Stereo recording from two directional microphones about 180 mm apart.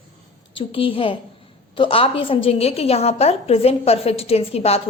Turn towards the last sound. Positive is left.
turn(degrees=35)  # may be behind; listen again after turning